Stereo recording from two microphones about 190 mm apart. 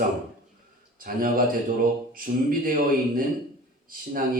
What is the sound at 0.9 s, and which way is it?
A man's voice, 50° right (ahead or behind).